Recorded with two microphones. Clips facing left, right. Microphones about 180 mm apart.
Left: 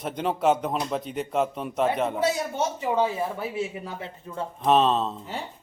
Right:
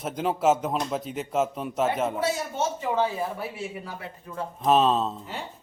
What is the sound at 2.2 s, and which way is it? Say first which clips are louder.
Speech: left 2 dB; 15° left (ahead or behind).